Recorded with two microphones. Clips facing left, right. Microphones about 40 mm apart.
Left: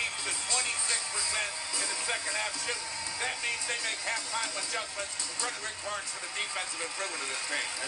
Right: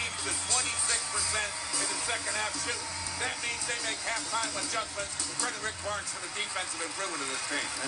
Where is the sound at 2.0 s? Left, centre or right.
Centre.